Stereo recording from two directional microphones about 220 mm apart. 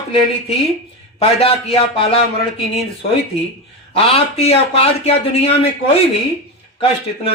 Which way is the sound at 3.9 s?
25° left (ahead or behind).